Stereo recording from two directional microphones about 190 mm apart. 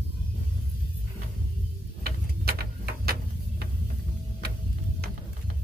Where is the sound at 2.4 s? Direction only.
55° right (ahead or behind).